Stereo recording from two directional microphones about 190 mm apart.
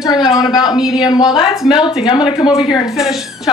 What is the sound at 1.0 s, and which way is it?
A woman's voice, 20° left (ahead or behind).